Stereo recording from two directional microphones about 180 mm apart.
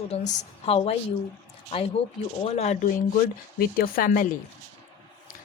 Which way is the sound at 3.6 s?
55° left (ahead or behind).